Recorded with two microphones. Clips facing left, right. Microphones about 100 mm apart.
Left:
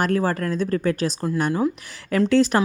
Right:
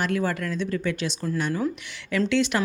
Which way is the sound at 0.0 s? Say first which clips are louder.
Left 4 dB; 40° left (ahead or behind).